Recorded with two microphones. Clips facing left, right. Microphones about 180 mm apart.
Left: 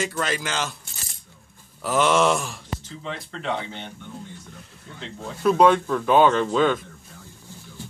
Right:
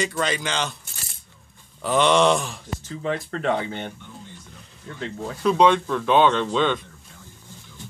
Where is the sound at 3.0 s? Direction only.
50° right (ahead or behind).